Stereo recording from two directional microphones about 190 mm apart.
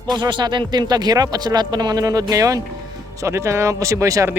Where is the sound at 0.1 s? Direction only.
25° right (ahead or behind).